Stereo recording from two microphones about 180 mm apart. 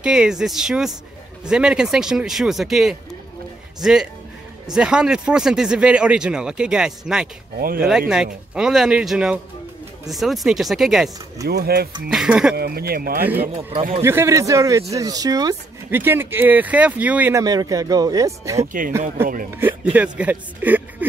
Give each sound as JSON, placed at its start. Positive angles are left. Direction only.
{"t": 0.0, "sound": "speech", "side_deg": -5}
{"t": 7.5, "sound": "speech", "side_deg": -55}
{"t": 8.5, "sound": "speech", "side_deg": -5}
{"t": 11.4, "sound": "speech", "side_deg": -60}
{"t": 12.1, "sound": "speech", "side_deg": -5}
{"t": 12.5, "sound": "speech", "side_deg": -60}
{"t": 14.0, "sound": "speech", "side_deg": -15}
{"t": 18.7, "sound": "speech", "side_deg": -50}
{"t": 19.2, "sound": "speech", "side_deg": -15}